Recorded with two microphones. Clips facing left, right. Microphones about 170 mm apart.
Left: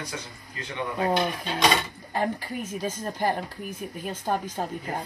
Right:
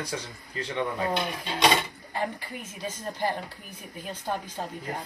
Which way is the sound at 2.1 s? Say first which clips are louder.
Left 5 dB; 45° left (ahead or behind).